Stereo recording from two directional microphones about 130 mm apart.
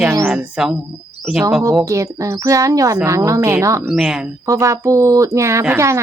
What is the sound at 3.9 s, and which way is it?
Speech, 5° right (ahead or behind).